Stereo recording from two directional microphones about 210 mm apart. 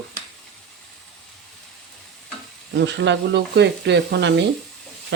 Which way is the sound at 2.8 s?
55° right (ahead or behind).